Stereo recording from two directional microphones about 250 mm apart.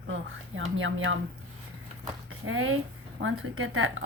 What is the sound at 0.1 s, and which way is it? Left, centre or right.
A woman's voice, right.